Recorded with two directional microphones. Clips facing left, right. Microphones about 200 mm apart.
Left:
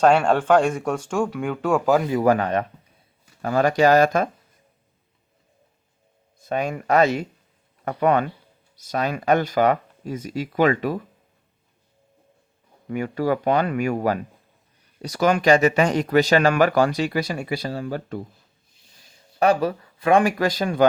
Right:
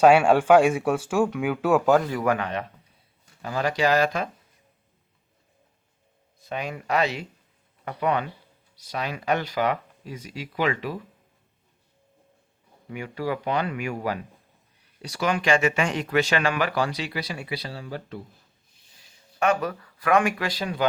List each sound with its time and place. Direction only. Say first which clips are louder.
0.0 s speech: right 1 dB; 5° right (ahead or behind)
2.2 s speech: left 6 dB; 40° left (ahead or behind)
6.5 s speech: left 6 dB; 50° left (ahead or behind)
12.9 s speech: left 6 dB; 45° left (ahead or behind)
19.4 s speech: left 5 dB; 35° left (ahead or behind); by 20.8 s 50° left (ahead or behind)